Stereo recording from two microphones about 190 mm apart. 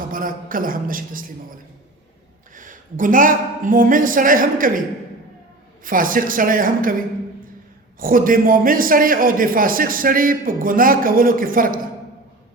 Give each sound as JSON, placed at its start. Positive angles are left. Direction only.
{"t": 0.1, "sound": "a man's voice", "side_deg": -45}
{"t": 2.6, "sound": "a man's voice", "side_deg": -45}
{"t": 5.8, "sound": "a man's voice", "side_deg": -45}
{"t": 7.9, "sound": "a man's voice", "side_deg": -45}